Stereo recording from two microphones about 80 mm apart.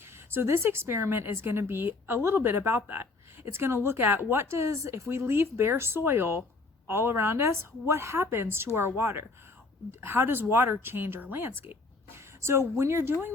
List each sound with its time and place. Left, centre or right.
0.3 s speech: right